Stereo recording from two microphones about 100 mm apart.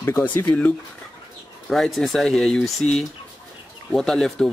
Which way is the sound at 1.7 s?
5° left (ahead or behind).